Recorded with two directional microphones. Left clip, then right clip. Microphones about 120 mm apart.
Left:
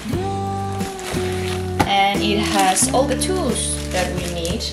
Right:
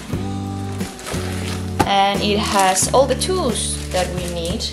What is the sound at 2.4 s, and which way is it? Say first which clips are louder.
Speech: right 2 dB; 15° right (ahead or behind).